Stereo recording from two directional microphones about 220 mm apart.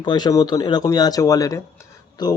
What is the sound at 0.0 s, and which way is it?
Speech, 20° left (ahead or behind).